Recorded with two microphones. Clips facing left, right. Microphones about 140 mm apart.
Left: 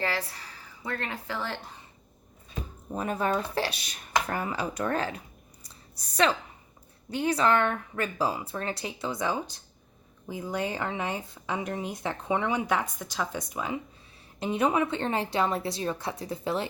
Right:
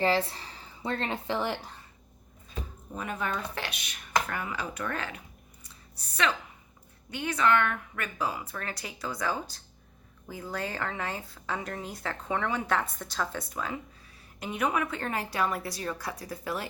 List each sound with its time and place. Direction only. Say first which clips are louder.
0.0 s speech: right 5 dB; 25° right (ahead or behind)
2.9 s speech: left 5 dB; 35° left (ahead or behind); by 13.7 s 15° left (ahead or behind)
14.3 s speech: left 4 dB; 30° left (ahead or behind)